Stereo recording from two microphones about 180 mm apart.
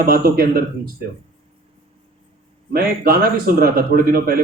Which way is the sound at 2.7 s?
55° right (ahead or behind).